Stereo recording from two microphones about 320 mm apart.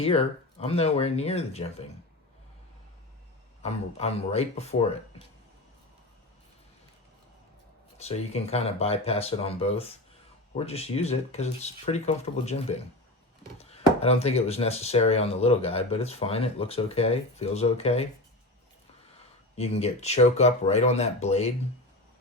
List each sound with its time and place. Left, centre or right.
0.0 s speech: centre
3.6 s speech: centre
7.9 s speech: centre
19.5 s speech: centre